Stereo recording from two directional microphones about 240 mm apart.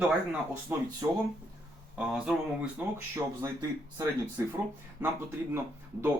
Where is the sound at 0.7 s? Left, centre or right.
Centre.